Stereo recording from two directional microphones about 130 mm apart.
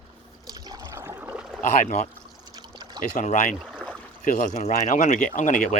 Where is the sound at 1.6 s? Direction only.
70° left (ahead or behind).